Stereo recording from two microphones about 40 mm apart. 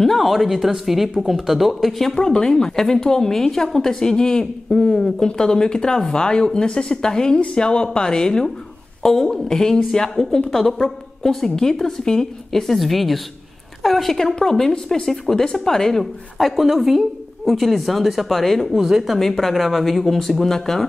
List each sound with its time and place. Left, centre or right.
0.0 s speech: centre
2.1 s a woman's voice: centre
16.0 s a woman's voice: centre
18.8 s speech: centre
19.1 s a woman's voice: centre